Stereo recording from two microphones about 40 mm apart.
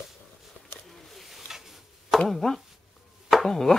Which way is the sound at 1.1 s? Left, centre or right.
Centre.